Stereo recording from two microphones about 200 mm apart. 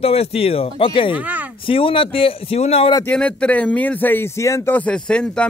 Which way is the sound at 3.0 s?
5° left (ahead or behind).